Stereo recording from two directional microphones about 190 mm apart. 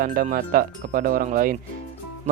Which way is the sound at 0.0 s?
50° right (ahead or behind).